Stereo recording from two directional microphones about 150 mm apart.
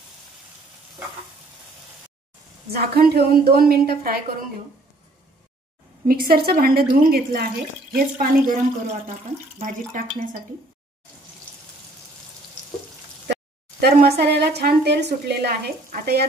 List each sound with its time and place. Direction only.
2.7 s speech: 90° right
6.0 s speech: 80° right
9.6 s speech: 60° right (ahead or behind)
13.7 s speech: 90° right